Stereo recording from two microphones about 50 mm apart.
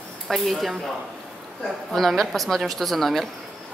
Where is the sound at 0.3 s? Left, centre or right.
Centre.